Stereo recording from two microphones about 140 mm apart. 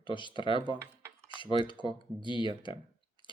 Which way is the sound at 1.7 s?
35° right (ahead or behind).